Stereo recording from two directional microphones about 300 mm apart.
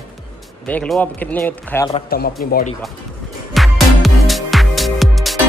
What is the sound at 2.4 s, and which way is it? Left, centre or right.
Speech, left.